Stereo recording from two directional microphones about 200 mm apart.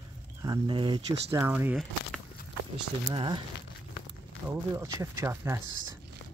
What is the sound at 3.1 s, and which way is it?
Speech, 25° right (ahead or behind).